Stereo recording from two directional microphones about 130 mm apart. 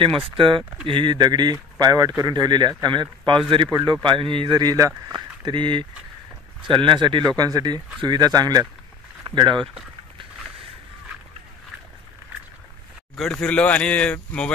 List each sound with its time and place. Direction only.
0.4 s speech: 40° right (ahead or behind)
13.1 s speech: 5° left (ahead or behind)